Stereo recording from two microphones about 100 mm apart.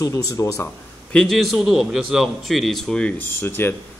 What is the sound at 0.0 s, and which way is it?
Speech, 35° left (ahead or behind).